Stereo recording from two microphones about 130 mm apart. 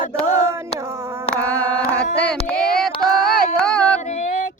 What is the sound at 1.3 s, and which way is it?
Child singing, 10° left (ahead or behind).